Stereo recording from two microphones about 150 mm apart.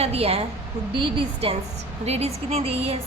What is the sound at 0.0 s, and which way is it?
A woman's voice, 40° right (ahead or behind).